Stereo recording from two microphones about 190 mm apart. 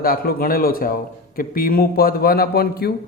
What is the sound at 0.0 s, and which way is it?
A man's voice, 50° left (ahead or behind).